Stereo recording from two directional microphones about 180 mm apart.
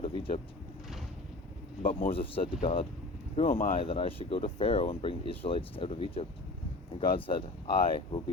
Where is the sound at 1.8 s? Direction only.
50° left (ahead or behind).